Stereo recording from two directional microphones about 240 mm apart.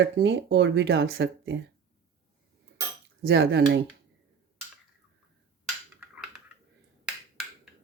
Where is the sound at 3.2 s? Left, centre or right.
Right.